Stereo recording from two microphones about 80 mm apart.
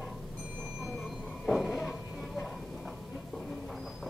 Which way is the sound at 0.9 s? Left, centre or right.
Centre.